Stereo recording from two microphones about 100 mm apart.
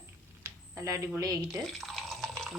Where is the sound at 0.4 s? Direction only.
30° right (ahead or behind).